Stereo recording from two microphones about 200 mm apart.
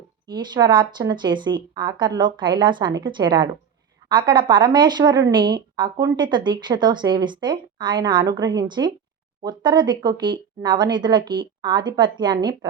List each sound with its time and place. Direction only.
0.3 s a woman's voice: 20° right (ahead or behind)